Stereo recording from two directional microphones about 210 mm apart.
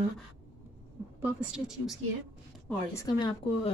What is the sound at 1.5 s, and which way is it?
Speech, centre (ahead or behind).